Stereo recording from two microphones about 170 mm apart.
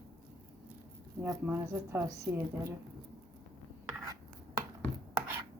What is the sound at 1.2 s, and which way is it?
Speech, 15° right (ahead or behind).